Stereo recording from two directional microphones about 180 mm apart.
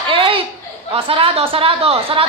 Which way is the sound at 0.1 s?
30° right (ahead or behind).